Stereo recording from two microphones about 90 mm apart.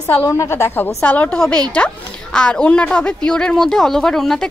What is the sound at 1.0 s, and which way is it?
Speech, 15° left (ahead or behind).